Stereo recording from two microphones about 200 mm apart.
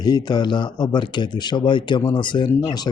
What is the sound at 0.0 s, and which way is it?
Speech, 20° left (ahead or behind).